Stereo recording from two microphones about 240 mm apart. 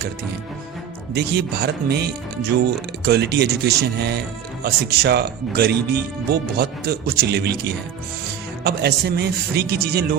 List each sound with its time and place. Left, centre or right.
1.1 s speech: right